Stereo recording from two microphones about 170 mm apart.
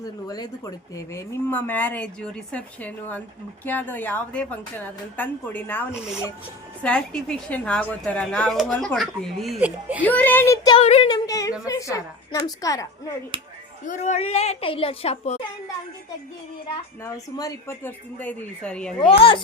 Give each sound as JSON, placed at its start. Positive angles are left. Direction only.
{"t": 0.0, "sound": "speech", "side_deg": 20}
{"t": 5.9, "sound": "a woman's voice", "side_deg": -5}
{"t": 10.0, "sound": "speech", "side_deg": 10}
{"t": 10.8, "sound": "a woman's voice", "side_deg": 35}
{"t": 11.1, "sound": "a woman's voice", "side_deg": 20}
{"t": 13.3, "sound": "speech", "side_deg": -30}
{"t": 13.8, "sound": "a woman's voice", "side_deg": 45}
{"t": 17.0, "sound": "speech", "side_deg": 20}
{"t": 18.9, "sound": "a woman's voice", "side_deg": 30}